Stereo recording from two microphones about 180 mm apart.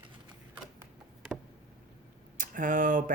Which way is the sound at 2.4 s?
50° right (ahead or behind).